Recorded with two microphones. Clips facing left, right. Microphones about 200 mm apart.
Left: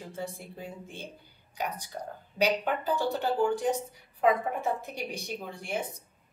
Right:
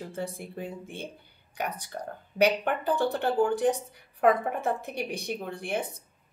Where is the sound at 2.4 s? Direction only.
60° right (ahead or behind).